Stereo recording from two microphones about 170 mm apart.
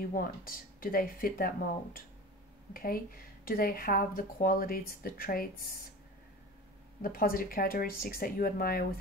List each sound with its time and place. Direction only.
0.0 s speech: 55° left (ahead or behind)
2.7 s speech: 60° left (ahead or behind)
7.0 s speech: 60° left (ahead or behind)